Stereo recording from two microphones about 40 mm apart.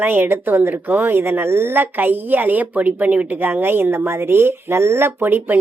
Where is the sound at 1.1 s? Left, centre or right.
Right.